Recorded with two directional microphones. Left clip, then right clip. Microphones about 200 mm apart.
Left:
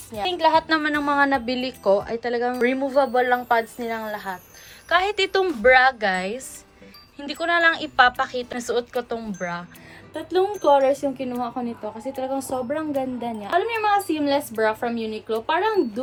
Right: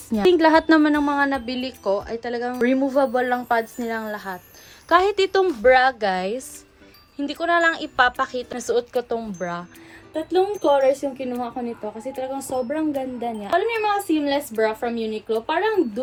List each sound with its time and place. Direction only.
0.3 s a woman's voice: 55° right (ahead or behind)
0.8 s a woman's voice: 20° right (ahead or behind)
2.6 s a woman's voice: 20° right (ahead or behind)
10.1 s a woman's voice: centre (ahead or behind)